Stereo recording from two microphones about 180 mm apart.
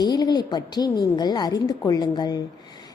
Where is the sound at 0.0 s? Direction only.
25° left (ahead or behind).